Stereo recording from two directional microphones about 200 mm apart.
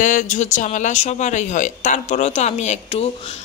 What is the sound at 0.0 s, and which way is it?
A woman's voice, 40° left (ahead or behind).